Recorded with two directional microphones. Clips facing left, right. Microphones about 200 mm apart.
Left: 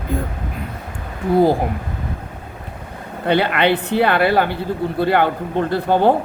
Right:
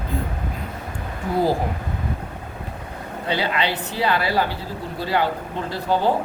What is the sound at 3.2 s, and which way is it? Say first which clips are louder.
Speech: left 7 dB; 60° left (ahead or behind).